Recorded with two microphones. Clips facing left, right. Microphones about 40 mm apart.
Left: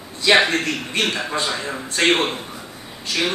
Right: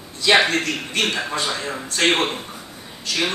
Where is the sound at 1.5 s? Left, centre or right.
Centre.